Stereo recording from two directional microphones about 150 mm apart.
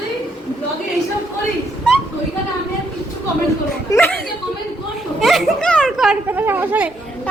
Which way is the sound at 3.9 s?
25° left (ahead or behind).